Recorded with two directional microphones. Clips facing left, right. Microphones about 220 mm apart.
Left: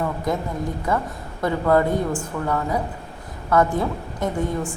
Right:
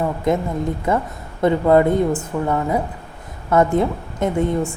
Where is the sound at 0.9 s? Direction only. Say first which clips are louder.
Right 3 dB; 25° right (ahead or behind).